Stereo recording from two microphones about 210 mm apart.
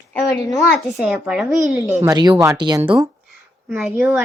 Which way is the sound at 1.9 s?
15° right (ahead or behind).